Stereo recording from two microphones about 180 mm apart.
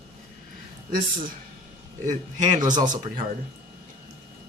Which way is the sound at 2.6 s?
20° right (ahead or behind).